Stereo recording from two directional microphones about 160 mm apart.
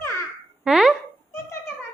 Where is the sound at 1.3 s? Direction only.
15° left (ahead or behind).